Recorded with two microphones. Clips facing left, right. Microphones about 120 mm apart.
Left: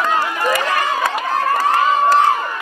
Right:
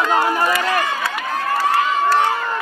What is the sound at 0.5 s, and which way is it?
Crowd, 45° left (ahead or behind).